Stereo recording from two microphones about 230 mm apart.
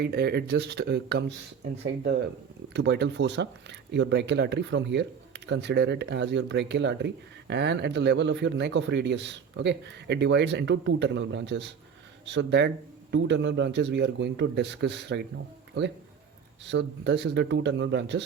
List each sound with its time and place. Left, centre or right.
0.0 s speech: right
2.7 s speech: right
16.6 s speech: right